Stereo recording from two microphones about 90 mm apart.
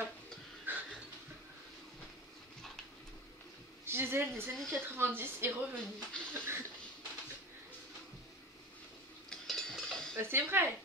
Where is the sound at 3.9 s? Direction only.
25° right (ahead or behind).